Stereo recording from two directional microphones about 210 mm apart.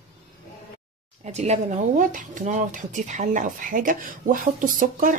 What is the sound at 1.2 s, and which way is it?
Speech, 30° right (ahead or behind).